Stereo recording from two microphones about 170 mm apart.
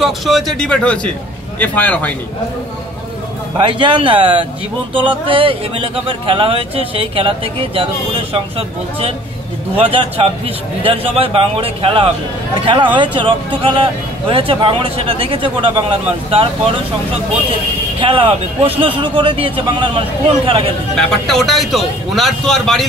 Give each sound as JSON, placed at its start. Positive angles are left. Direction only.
{"t": 0.0, "sound": "a man's voice", "side_deg": 0}
{"t": 3.5, "sound": "speech", "side_deg": -30}
{"t": 18.0, "sound": "speech", "side_deg": -30}
{"t": 20.9, "sound": "a man's voice", "side_deg": 0}